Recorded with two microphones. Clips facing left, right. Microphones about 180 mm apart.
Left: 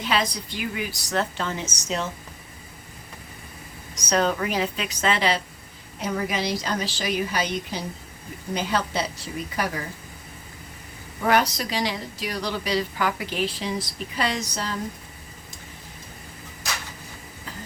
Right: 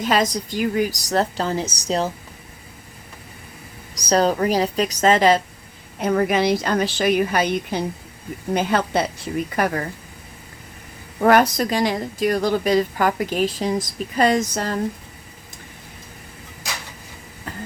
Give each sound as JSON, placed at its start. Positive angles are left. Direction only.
{"t": 0.0, "sound": "a woman's voice", "side_deg": -45}
{"t": 3.9, "sound": "a woman's voice", "side_deg": -35}
{"t": 6.0, "sound": "a woman's voice", "side_deg": -55}
{"t": 11.2, "sound": "speech", "side_deg": -50}